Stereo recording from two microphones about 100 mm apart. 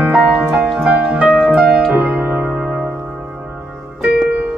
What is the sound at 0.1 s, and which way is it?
Music, 5° right (ahead or behind).